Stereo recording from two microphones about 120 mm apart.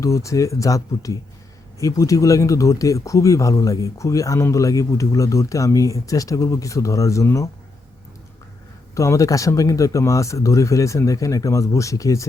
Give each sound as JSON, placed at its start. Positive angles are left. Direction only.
{"t": 0.0, "sound": "speech", "side_deg": 25}
{"t": 9.0, "sound": "speech", "side_deg": 25}